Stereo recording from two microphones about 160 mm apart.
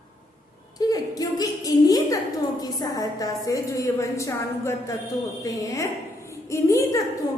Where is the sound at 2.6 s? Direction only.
25° left (ahead or behind).